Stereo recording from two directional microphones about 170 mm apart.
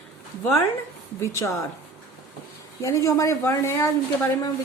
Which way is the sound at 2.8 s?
20° left (ahead or behind).